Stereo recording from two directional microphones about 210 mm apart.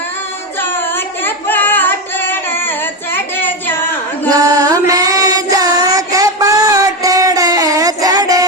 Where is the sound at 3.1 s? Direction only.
10° left (ahead or behind).